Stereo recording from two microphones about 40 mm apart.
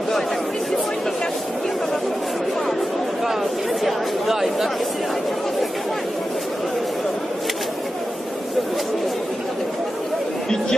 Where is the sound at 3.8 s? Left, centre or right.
Centre.